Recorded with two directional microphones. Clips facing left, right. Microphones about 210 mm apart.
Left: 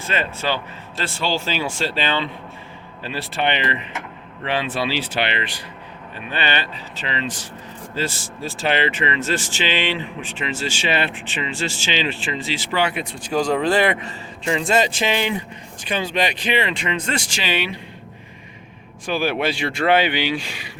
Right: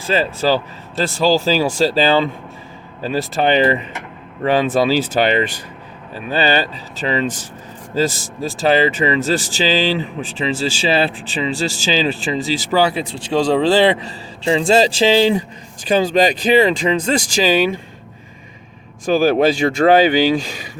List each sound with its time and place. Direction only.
0.0 s a man's voice: 35° right (ahead or behind)
19.0 s a man's voice: 40° right (ahead or behind)